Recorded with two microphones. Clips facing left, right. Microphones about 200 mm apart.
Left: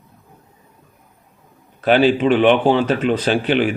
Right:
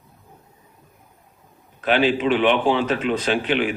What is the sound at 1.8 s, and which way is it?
Speech, 40° left (ahead or behind).